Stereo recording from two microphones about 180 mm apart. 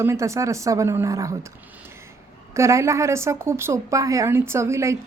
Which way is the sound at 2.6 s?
15° right (ahead or behind).